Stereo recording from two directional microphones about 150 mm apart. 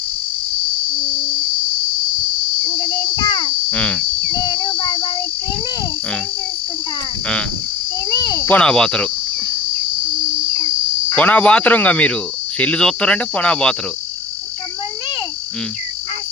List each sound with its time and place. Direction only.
3.2 s a sound: 35° left (ahead or behind)
3.7 s speech: 10° left (ahead or behind)
4.3 s cricket: 30° left (ahead or behind)
4.8 s child singing: 35° left (ahead or behind)
8.1 s cricket: 20° left (ahead or behind); by 9.0 s 5° left (ahead or behind)
11.1 s speech: 10° left (ahead or behind)